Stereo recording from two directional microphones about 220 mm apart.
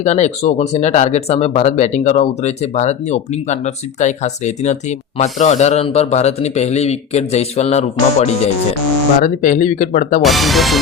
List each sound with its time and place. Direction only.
0.0 s speech: 30° left (ahead or behind)
10.2 s speech: centre (ahead or behind)